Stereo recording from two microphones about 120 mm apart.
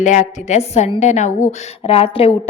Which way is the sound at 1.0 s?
75° left (ahead or behind).